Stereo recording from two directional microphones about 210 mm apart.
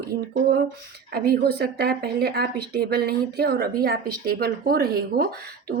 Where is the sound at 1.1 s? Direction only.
45° right (ahead or behind).